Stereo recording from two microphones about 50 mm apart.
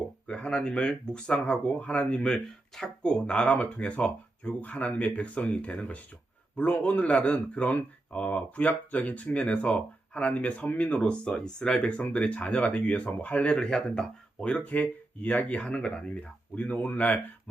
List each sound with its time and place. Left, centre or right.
0.3 s speech: centre
2.2 s speech: centre; by 17.2 s left